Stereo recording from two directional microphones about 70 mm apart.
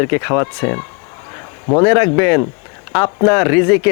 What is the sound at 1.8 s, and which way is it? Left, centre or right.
Speech, left.